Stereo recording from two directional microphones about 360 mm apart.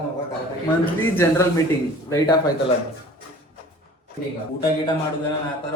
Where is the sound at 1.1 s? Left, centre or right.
Centre.